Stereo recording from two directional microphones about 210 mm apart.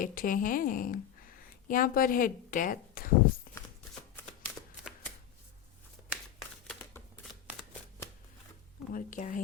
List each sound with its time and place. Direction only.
0.0 s a woman's voice: 40° left (ahead or behind)
3.5 s shuffling cards: 45° left (ahead or behind)
6.7 s a sound: 10° left (ahead or behind)
8.9 s a woman's voice: 40° left (ahead or behind)